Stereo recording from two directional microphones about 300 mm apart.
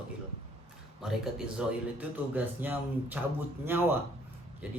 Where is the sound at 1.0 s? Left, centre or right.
Centre.